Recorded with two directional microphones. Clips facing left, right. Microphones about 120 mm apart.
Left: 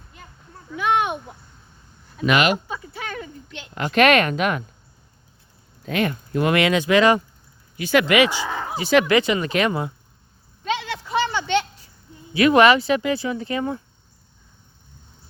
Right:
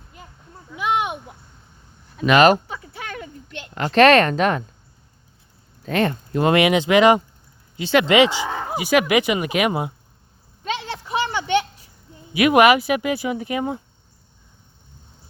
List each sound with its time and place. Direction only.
2.2 s speech: 35° right (ahead or behind)
3.8 s speech: 35° right (ahead or behind)
5.9 s speech: 35° right (ahead or behind)
8.7 s speech: 10° right (ahead or behind)
10.8 s a sound: 15° right (ahead or behind)
12.3 s speech: 15° right (ahead or behind)